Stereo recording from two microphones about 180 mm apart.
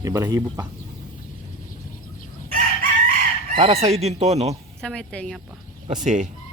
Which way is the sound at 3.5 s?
35° right (ahead or behind).